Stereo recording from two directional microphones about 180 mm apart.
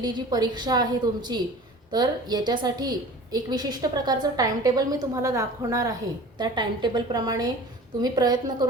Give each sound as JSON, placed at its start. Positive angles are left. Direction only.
{"t": 0.0, "sound": "a woman's voice", "side_deg": -20}